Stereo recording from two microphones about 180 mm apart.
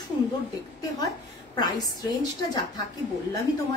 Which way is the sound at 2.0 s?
25° left (ahead or behind).